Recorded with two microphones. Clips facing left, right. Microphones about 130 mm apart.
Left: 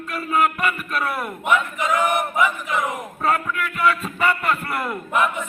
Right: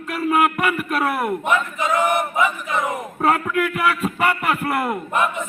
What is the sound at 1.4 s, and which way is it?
Choir, 30° right (ahead or behind).